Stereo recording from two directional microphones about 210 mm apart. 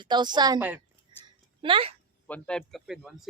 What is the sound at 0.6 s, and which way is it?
Speech, 10° right (ahead or behind).